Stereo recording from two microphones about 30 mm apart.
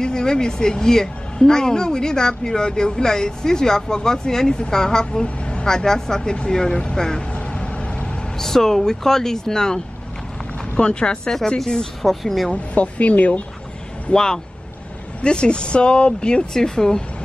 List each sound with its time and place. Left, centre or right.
0.0 s a woman's voice: left
5.2 s vehicle: left
5.7 s a woman's voice: centre
7.5 s vehicle: left
8.4 s speech: centre
10.8 s a woman's voice: left
12.0 s speech: centre
12.7 s speech: left
14.1 s a woman's voice: left
15.2 s speech: left
16.5 s a woman's voice: centre